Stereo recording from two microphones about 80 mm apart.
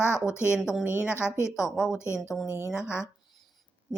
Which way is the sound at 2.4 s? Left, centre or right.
Left.